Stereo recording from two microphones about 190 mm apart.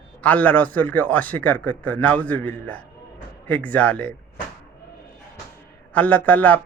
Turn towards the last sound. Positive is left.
turn(degrees=10)  # may be behind; listen again after turning